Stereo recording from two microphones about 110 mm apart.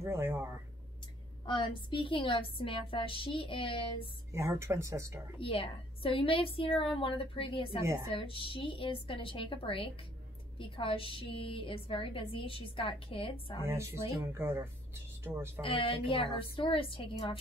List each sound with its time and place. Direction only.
0.0 s speech: 25° right (ahead or behind)
1.4 s a woman's voice: 45° left (ahead or behind)
4.3 s speech: 25° right (ahead or behind)
5.4 s a woman's voice: 55° left (ahead or behind)
7.8 s speech: 25° right (ahead or behind)
8.1 s a woman's voice: 55° left (ahead or behind)
13.7 s speech: 25° right (ahead or behind)
15.6 s a woman's voice: 60° left (ahead or behind)